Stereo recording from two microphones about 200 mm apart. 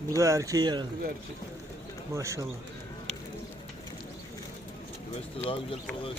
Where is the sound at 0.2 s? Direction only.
15° right (ahead or behind).